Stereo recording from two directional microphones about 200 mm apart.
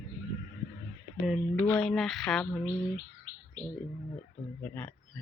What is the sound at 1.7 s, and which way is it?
Speech, 5° left (ahead or behind).